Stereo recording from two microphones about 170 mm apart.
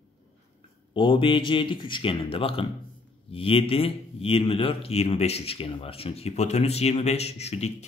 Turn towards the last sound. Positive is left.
turn(degrees=40)  # may be behind; listen again after turning